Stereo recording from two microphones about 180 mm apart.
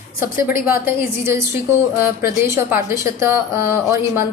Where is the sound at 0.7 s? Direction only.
15° right (ahead or behind).